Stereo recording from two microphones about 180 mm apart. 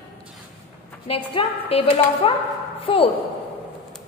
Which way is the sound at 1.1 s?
30° left (ahead or behind).